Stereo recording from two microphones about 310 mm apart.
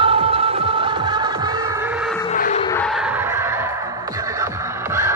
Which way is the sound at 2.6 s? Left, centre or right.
Centre.